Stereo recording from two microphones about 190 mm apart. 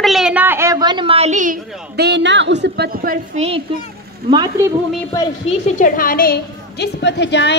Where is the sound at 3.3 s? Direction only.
35° right (ahead or behind).